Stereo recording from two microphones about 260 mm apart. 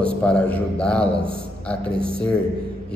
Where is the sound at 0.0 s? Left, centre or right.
Centre.